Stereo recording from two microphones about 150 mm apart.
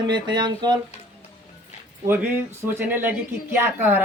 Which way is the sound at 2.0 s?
15° right (ahead or behind).